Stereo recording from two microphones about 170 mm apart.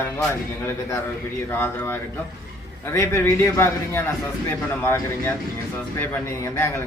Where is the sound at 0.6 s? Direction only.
15° left (ahead or behind).